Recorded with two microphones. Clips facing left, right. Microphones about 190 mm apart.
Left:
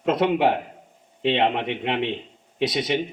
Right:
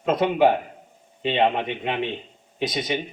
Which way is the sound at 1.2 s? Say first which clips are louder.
Even; 65° left (ahead or behind).